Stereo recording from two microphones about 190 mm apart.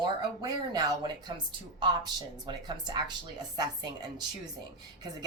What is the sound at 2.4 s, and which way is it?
Speech, 20° right (ahead or behind).